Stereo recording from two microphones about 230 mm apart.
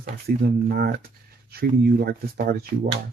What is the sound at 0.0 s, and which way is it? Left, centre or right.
Speech, right.